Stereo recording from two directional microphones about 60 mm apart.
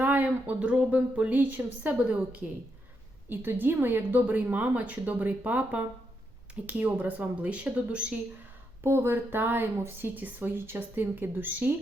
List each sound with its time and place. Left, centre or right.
0.0 s speech: right
8.8 s a woman's voice: right